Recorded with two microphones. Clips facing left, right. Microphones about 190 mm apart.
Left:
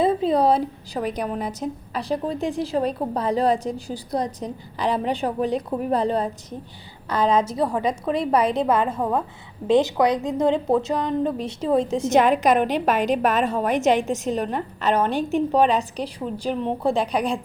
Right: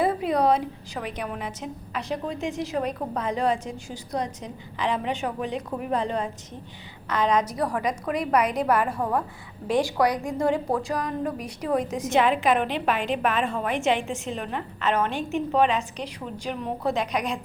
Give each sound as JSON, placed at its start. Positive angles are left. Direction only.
{"t": 0.0, "sound": "a woman's voice", "side_deg": 25}
{"t": 12.1, "sound": "a woman's voice", "side_deg": 45}